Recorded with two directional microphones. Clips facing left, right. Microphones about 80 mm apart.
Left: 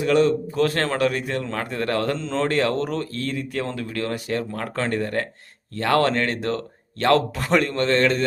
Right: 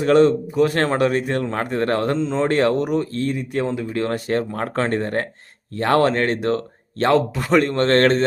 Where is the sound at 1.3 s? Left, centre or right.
Right.